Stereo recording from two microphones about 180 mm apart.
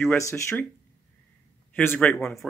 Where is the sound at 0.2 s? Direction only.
15° left (ahead or behind).